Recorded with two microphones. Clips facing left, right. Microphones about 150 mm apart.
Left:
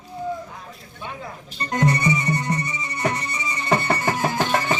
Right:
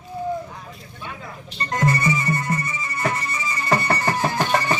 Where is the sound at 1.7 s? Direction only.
20° left (ahead or behind).